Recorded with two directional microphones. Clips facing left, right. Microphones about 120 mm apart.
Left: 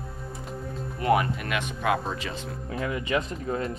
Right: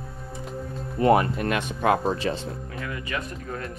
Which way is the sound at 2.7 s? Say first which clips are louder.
Left 7 dB; 25° left (ahead or behind).